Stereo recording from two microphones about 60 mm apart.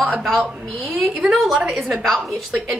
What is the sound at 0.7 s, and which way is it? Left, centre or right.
Speech, centre.